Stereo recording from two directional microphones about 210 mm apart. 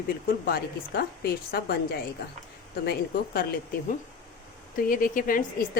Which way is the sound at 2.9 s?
45° left (ahead or behind).